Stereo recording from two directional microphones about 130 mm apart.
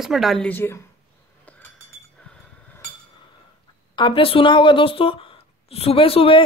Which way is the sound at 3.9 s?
40° left (ahead or behind).